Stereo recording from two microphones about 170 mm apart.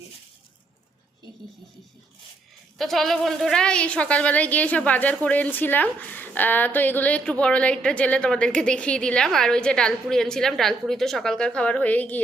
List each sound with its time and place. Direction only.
2.7 s a woman's voice: centre (ahead or behind)